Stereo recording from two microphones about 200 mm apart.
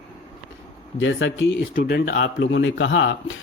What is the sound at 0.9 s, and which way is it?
Speech, 70° left (ahead or behind).